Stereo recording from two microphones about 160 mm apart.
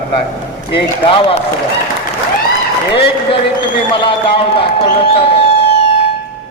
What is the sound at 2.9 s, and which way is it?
A man's voice, 35° left (ahead or behind).